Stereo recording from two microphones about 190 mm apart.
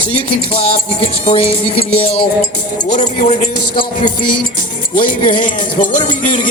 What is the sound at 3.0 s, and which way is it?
A man's voice, 40° left (ahead or behind).